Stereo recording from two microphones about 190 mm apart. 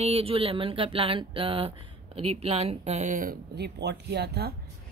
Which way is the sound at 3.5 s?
60° right (ahead or behind).